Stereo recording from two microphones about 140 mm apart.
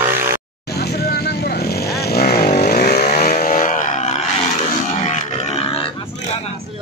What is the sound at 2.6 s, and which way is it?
Vehicle, 60° left (ahead or behind).